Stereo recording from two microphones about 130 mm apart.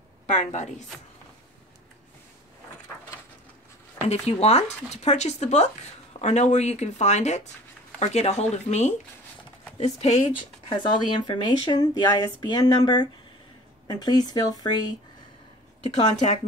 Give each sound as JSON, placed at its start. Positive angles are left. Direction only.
{"t": 0.3, "sound": "a woman's voice", "side_deg": 65}
{"t": 4.1, "sound": "speech", "side_deg": 55}
{"t": 10.3, "sound": "speech", "side_deg": 35}